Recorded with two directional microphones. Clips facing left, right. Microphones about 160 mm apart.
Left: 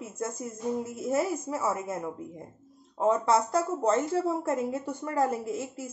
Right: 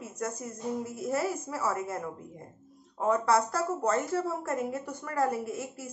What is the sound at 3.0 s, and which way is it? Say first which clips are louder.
Speech: left 2 dB; 20° left (ahead or behind).